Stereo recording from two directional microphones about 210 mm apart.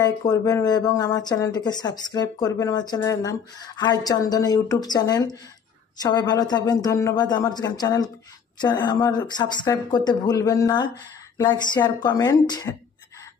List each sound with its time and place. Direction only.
0.0 s speech: 15° left (ahead or behind)